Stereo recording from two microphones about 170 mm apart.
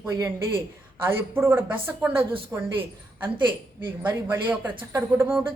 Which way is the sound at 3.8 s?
10° right (ahead or behind).